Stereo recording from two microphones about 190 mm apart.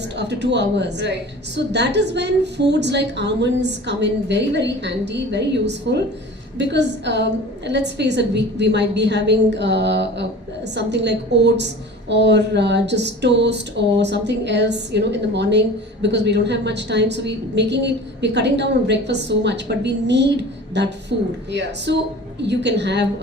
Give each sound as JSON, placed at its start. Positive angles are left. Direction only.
{"t": 0.2, "sound": "a woman's voice", "side_deg": -65}